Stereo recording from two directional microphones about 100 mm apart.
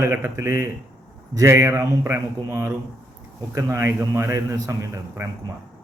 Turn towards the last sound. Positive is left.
turn(degrees=-30)  # may be behind; listen again after turning